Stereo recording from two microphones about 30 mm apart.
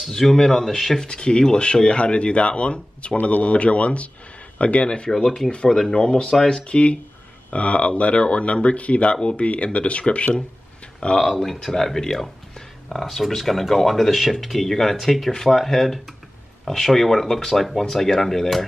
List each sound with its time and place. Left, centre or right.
0.0 s speech: centre
1.0 s speech: left
3.2 s speech: left
3.4 s speech: left
5.1 s speech: centre
6.7 s speech: left
9.1 s speech: left
11.1 s speech: centre
12.9 s speech: centre